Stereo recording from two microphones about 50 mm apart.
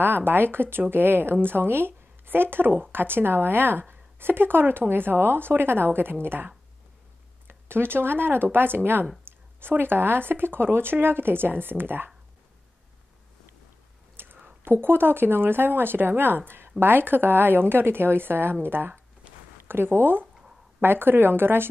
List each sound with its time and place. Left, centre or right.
0.0 s a woman's voice: right
9.3 s a sound: right
9.6 s a woman's voice: right
14.1 s a woman's voice: right